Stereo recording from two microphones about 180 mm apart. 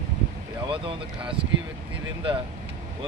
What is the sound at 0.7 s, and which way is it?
Speech, 30° right (ahead or behind).